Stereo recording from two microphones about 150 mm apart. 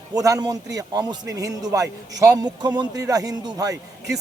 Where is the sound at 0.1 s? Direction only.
25° right (ahead or behind).